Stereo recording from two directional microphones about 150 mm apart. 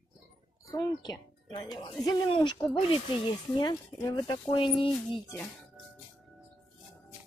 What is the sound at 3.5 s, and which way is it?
Speech, 30° left (ahead or behind).